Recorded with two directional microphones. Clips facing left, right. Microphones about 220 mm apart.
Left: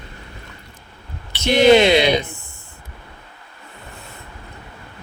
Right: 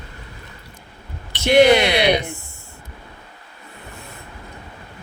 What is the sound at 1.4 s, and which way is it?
Speech, 20° left (ahead or behind).